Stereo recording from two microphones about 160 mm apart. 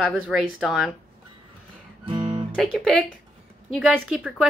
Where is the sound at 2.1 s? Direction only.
30° right (ahead or behind).